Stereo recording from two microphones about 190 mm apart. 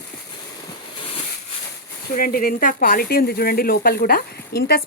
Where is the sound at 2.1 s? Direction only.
50° left (ahead or behind).